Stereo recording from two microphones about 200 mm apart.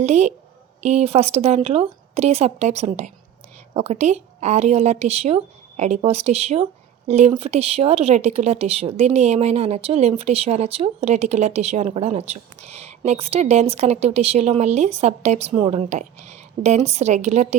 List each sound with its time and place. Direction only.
0.0 s speech: 35° right (ahead or behind)